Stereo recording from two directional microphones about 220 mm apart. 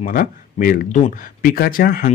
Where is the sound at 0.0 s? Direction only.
40° left (ahead or behind).